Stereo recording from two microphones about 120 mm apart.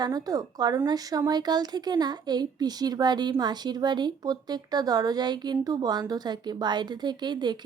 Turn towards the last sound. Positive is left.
turn(degrees=-35)  # may be behind; listen again after turning